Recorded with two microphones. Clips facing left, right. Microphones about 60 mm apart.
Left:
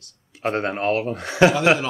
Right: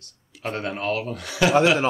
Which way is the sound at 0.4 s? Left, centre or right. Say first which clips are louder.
Left 5 dB; left.